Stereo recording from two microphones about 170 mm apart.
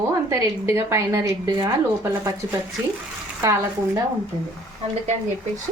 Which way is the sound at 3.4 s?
20° right (ahead or behind).